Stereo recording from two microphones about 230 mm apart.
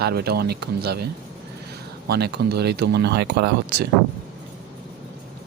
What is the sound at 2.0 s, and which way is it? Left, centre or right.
Speech, right.